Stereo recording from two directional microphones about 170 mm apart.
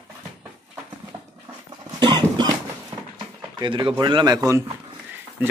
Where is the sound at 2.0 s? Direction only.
25° right (ahead or behind).